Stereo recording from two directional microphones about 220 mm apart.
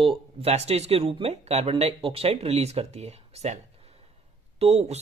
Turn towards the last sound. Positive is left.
turn(degrees=-30)  # may be behind; listen again after turning